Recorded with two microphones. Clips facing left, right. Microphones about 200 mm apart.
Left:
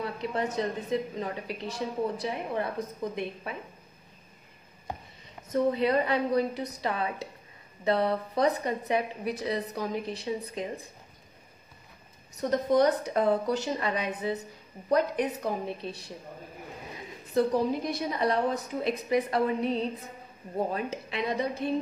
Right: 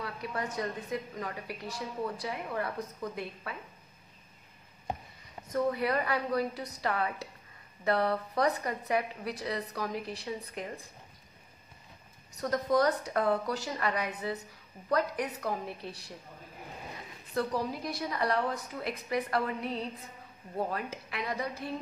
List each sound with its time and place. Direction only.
0.0 s a woman's voice: 25° left (ahead or behind)
5.5 s a woman's voice: 25° left (ahead or behind)
12.4 s a woman's voice: 25° left (ahead or behind)
17.3 s a woman's voice: 20° left (ahead or behind)